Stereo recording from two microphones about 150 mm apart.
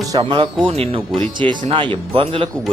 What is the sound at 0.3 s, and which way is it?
Speech, 40° right (ahead or behind).